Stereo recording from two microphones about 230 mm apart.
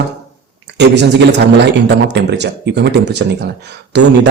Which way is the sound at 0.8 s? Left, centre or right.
Right.